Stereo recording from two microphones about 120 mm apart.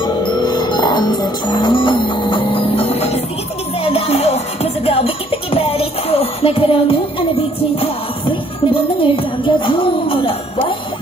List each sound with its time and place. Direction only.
0.0 s music: 35° left (ahead or behind)